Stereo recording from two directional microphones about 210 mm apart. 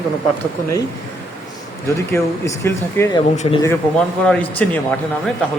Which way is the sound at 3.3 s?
35° left (ahead or behind).